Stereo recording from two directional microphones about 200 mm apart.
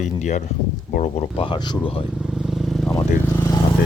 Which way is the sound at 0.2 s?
35° left (ahead or behind).